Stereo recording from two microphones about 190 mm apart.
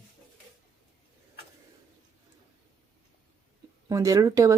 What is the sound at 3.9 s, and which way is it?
Speech, 20° right (ahead or behind).